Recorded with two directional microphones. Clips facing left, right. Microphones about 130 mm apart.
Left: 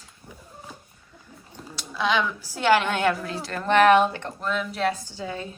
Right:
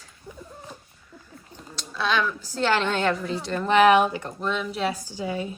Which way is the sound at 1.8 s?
15° left (ahead or behind).